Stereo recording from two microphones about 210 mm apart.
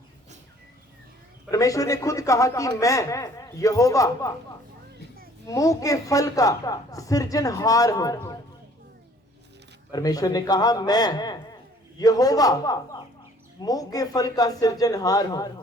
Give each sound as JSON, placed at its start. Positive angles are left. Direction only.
{"t": 1.5, "sound": "speech", "side_deg": 15}
{"t": 5.5, "sound": "speech", "side_deg": 15}
{"t": 9.9, "sound": "speech", "side_deg": 15}